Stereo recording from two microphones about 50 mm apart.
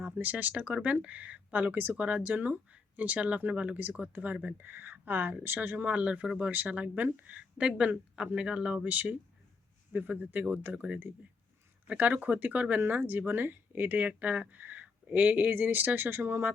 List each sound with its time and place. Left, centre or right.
0.0 s speech: right
2.0 s speech: right
5.5 s speech: right
6.5 s speech: right
8.4 s speech: right